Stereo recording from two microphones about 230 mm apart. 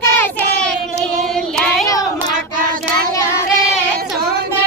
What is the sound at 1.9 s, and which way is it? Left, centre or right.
Child singing, centre.